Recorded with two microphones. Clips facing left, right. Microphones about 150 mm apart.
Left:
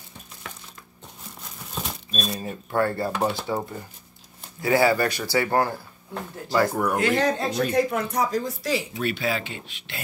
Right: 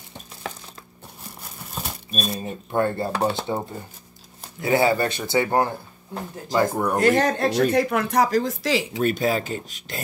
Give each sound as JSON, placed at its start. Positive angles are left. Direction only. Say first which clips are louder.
{"t": 1.8, "sound": "a sound", "louder": "right 1 dB", "side_deg": -5}
{"t": 2.4, "sound": "speech", "louder": "right 1 dB", "side_deg": -20}
{"t": 3.1, "sound": "speech", "louder": "right 2 dB", "side_deg": -35}
{"t": 3.3, "sound": "speech", "louder": "right 1 dB", "side_deg": -25}
{"t": 4.6, "sound": "speech", "louder": "even", "side_deg": -25}
{"t": 6.9, "sound": "speech", "louder": "right 3 dB", "side_deg": -40}
{"t": 9.0, "sound": "speech", "louder": "right 5 dB", "side_deg": -40}